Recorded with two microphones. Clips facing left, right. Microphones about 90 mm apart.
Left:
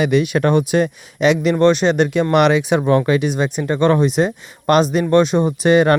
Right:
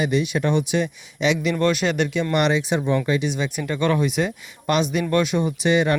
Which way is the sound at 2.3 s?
65° left (ahead or behind).